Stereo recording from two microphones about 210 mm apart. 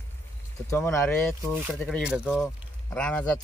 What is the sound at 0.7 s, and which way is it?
Speech, 15° left (ahead or behind).